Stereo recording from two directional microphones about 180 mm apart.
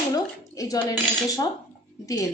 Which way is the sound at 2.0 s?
20° left (ahead or behind).